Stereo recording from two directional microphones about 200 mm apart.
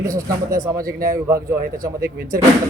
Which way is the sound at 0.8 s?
45° right (ahead or behind).